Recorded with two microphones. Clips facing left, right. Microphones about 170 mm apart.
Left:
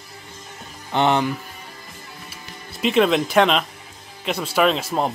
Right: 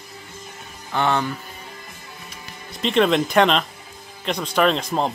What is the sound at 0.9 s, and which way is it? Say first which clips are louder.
Speech: left 3 dB; 20° left (ahead or behind).